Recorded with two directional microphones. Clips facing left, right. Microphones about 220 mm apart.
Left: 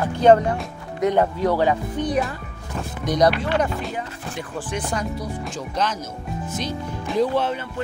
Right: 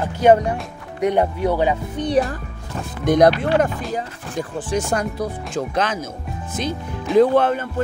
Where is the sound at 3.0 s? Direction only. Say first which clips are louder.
Right 5 dB; 55° right (ahead or behind).